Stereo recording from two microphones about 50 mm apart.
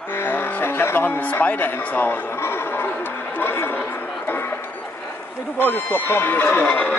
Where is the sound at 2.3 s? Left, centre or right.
Left.